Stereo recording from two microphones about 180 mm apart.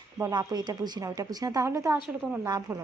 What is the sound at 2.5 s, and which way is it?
Speech, 15° right (ahead or behind).